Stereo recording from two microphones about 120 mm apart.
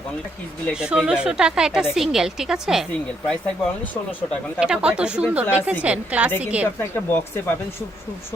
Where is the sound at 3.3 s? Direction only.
5° left (ahead or behind).